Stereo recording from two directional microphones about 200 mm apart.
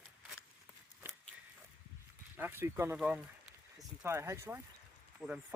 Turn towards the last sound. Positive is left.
turn(degrees=-5)  # may be behind; listen again after turning